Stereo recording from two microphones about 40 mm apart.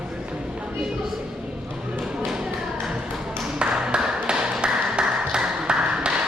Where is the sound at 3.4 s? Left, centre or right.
Right.